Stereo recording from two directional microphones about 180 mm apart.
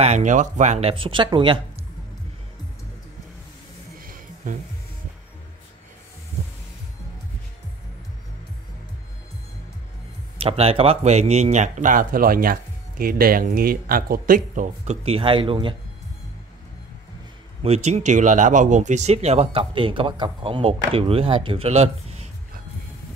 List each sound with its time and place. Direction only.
0.0 s speech: 40° right (ahead or behind)
4.0 s music: 50° right (ahead or behind)
10.3 s speech: 35° right (ahead or behind)
15.0 s speech: 30° right (ahead or behind)
17.6 s speech: 35° right (ahead or behind)